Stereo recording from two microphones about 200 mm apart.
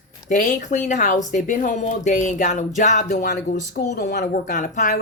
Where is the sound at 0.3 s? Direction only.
40° left (ahead or behind).